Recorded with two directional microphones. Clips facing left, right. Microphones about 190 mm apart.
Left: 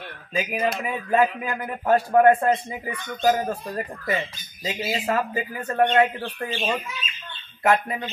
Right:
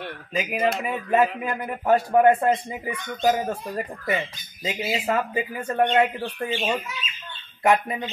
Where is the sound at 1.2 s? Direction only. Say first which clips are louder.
Even; 25° right (ahead or behind).